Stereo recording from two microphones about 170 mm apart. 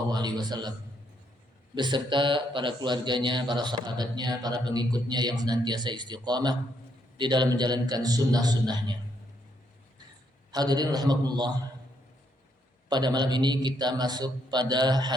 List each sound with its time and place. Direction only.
0.1 s speech: 25° right (ahead or behind)
1.7 s speech: 25° right (ahead or behind)
10.5 s speech: 25° right (ahead or behind)
12.9 s speech: 25° right (ahead or behind)